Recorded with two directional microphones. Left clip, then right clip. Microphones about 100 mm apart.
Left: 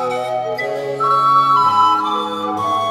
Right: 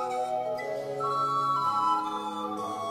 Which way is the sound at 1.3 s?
25° left (ahead or behind).